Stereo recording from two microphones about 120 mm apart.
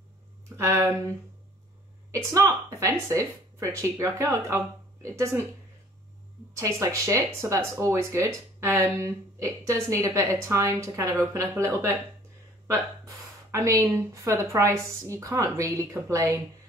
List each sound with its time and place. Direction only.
0.6 s speech: 25° right (ahead or behind)
2.1 s speech: 25° right (ahead or behind)
6.5 s speech: 25° right (ahead or behind)